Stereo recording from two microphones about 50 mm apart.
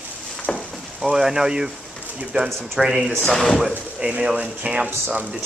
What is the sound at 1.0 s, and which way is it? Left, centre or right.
Speech, centre.